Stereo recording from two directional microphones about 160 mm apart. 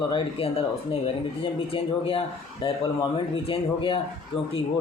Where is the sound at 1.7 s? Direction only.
35° left (ahead or behind).